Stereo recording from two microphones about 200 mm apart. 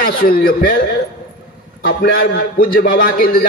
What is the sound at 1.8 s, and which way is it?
A man's voice, 50° left (ahead or behind).